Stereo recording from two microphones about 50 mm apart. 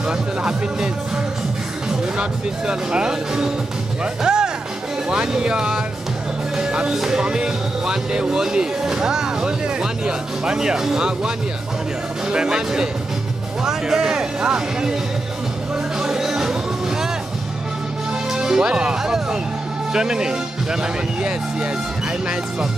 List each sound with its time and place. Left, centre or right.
0.0 s speech: centre
16.0 s music: centre
18.3 s speech: centre